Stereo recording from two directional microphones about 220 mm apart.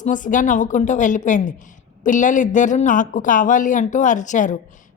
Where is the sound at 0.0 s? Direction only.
35° left (ahead or behind).